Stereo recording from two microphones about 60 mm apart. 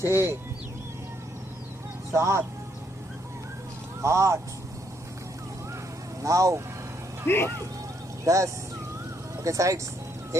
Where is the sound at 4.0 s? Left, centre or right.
Right.